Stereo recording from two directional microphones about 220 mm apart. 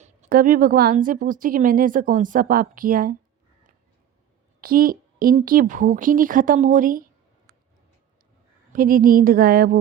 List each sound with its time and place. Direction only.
0.0 s a woman's voice: 35° right (ahead or behind)
4.6 s a woman's voice: 40° right (ahead or behind)
8.7 s a woman's voice: 40° right (ahead or behind)